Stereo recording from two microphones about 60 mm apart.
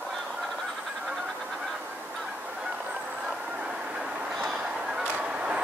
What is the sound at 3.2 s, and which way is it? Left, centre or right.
Vehicle, centre.